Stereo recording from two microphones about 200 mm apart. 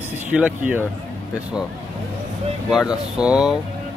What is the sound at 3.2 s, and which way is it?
Speech, 5° right (ahead or behind).